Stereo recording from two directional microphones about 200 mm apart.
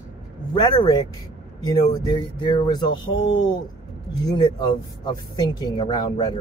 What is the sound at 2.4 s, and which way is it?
Speech, 20° left (ahead or behind).